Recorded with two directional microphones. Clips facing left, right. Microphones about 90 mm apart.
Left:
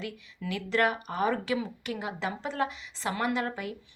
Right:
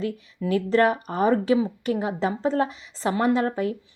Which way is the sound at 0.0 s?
35° right (ahead or behind).